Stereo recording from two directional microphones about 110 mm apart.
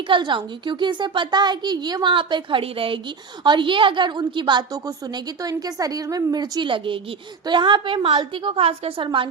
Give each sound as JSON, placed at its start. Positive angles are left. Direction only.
{"t": 0.1, "sound": "a child's voice", "side_deg": -45}